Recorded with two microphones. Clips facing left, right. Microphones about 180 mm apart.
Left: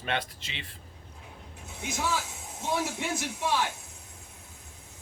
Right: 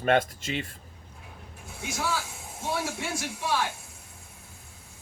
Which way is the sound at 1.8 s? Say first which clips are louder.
Even; 20° left (ahead or behind).